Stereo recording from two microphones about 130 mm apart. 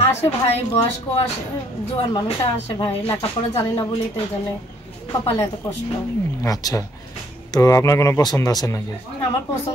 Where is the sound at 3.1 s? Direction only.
20° left (ahead or behind).